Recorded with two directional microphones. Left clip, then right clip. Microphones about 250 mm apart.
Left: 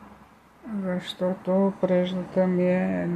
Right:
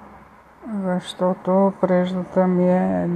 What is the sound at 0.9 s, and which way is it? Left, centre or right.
Speech, right.